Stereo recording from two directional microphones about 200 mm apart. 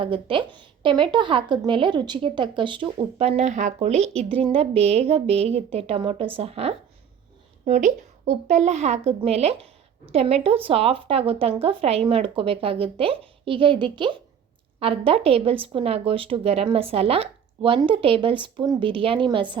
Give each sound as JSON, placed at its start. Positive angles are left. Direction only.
{"t": 0.0, "sound": "a woman's voice", "side_deg": -25}